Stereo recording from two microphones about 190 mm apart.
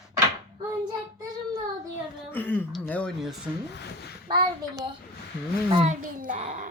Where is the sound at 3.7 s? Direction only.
60° left (ahead or behind).